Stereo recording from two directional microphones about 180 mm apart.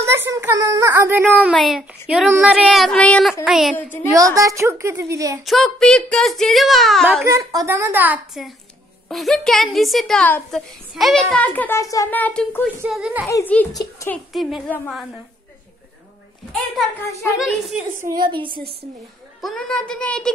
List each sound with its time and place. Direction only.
0.0 s a child's voice: 15° right (ahead or behind)
1.3 s a woman's voice: centre (ahead or behind)
4.1 s a child's voice: 20° right (ahead or behind)
5.4 s a woman's voice: centre (ahead or behind)
7.2 s a child's voice: 15° right (ahead or behind); by 12.6 s 10° left (ahead or behind)
12.8 s a woman's voice: 5° right (ahead or behind)
13.3 s a child's voice: 10° left (ahead or behind)
14.1 s a woman's voice: centre (ahead or behind)
17.4 s a woman's voice: centre (ahead or behind)
18.0 s a woman's voice: 25° right (ahead or behind)
18.5 s a woman's voice: 60° right (ahead or behind)
19.4 s a woman's voice: 5° left (ahead or behind)